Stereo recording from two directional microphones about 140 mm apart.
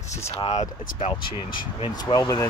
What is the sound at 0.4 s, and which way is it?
Speech, 45° left (ahead or behind).